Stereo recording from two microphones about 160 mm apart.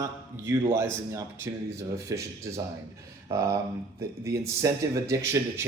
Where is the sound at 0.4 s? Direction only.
15° right (ahead or behind).